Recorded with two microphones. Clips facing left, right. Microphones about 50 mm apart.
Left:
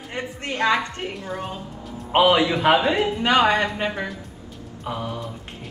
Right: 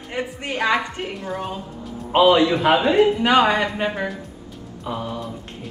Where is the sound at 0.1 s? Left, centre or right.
Centre.